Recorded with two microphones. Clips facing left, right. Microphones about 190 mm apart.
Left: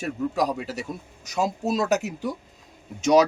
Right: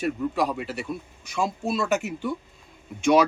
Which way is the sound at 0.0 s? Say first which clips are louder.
Even; 40° left (ahead or behind).